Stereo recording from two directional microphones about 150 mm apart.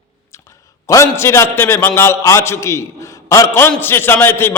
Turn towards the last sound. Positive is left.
turn(degrees=15)  # may be behind; listen again after turning